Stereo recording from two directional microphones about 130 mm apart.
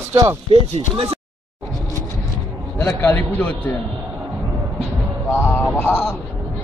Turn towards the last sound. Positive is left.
turn(degrees=10)  # may be behind; listen again after turning